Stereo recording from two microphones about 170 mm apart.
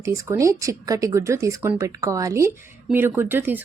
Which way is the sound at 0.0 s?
15° right (ahead or behind).